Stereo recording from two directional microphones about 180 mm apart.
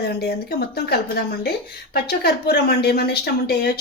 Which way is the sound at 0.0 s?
65° left (ahead or behind).